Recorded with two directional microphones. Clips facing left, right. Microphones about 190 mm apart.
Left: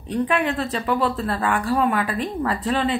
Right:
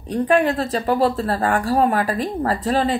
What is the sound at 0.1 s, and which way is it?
A woman's voice, 40° right (ahead or behind).